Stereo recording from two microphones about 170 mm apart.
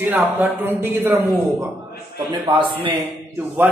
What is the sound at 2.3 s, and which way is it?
Speech, 30° right (ahead or behind).